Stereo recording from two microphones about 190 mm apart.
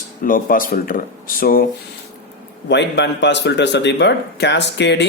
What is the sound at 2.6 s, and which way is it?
A man's voice, 65° left (ahead or behind).